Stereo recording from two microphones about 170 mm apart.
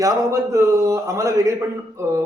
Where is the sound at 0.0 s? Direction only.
20° right (ahead or behind).